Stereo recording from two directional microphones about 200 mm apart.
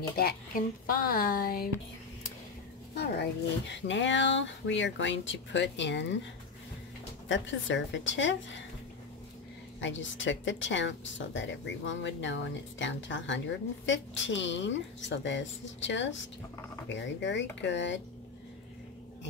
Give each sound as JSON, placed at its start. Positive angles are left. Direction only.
{"t": 0.1, "sound": "speech", "side_deg": 50}
{"t": 3.0, "sound": "speech", "side_deg": 60}
{"t": 7.2, "sound": "speech", "side_deg": 65}
{"t": 9.8, "sound": "speech", "side_deg": 70}